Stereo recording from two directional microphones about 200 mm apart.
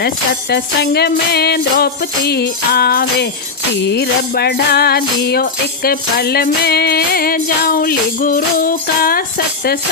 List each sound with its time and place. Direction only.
0.5 s music: 55° left (ahead or behind)